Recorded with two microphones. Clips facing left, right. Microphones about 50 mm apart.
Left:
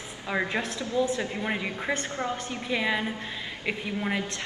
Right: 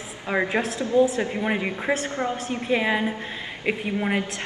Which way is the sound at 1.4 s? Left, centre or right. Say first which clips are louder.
Right 5 dB; centre.